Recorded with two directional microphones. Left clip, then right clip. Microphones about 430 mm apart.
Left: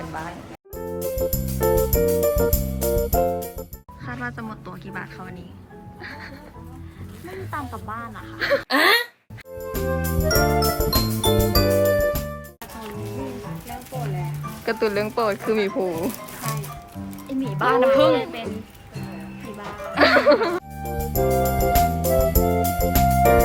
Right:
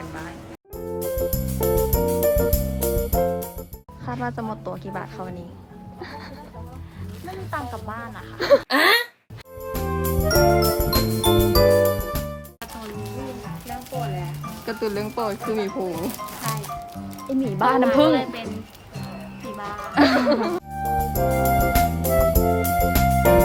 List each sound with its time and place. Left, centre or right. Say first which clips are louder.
0.9 s music: even; centre
4.0 s speech: right 3 dB; centre
7.5 s speech: right 1 dB; centre
9.7 s music: even; centre
14.0 s music: right 1 dB; centre
17.4 s speech: left 1 dB; right
18.2 s speech: even; centre
19.5 s music: even; centre